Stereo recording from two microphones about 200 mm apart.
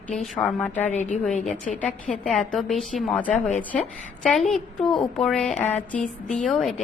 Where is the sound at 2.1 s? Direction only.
5° left (ahead or behind).